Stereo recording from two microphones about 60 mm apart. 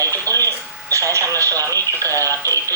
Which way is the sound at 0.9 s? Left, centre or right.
Right.